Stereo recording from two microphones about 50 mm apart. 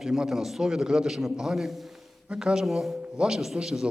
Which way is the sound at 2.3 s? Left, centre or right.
Centre.